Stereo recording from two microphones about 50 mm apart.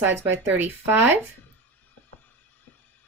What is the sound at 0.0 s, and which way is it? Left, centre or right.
A woman's voice, right.